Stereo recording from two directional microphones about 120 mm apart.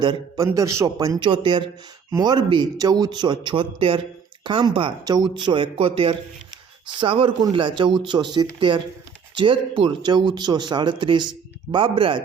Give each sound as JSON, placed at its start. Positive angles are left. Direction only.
{"t": 0.0, "sound": "speech", "side_deg": -40}
{"t": 0.4, "sound": "speech", "side_deg": -25}
{"t": 1.2, "sound": "speech", "side_deg": -45}